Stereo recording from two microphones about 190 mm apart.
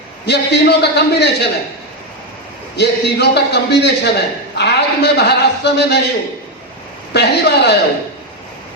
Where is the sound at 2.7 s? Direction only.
60° left (ahead or behind).